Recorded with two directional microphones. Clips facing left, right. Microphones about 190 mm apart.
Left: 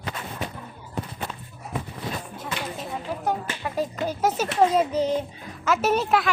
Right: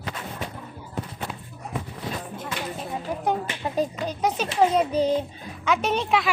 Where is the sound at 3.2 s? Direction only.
20° right (ahead or behind).